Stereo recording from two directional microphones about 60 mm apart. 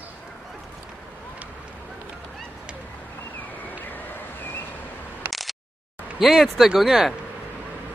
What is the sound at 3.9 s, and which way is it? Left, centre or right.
Vehicle, left.